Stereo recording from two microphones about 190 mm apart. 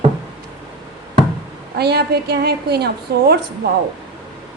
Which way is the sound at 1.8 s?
60° right (ahead or behind).